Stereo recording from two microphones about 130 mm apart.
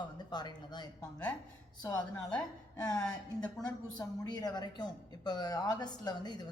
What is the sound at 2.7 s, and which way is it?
A woman's voice, 30° left (ahead or behind).